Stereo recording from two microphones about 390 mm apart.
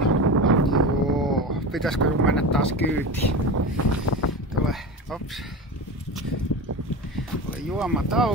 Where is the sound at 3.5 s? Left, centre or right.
Right.